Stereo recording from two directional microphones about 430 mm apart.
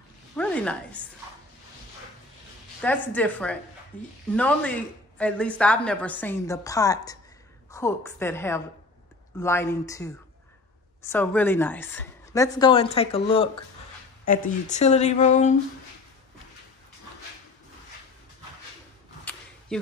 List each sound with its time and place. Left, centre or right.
0.4 s speech: centre
2.8 s a woman's voice: centre
19.7 s speech: centre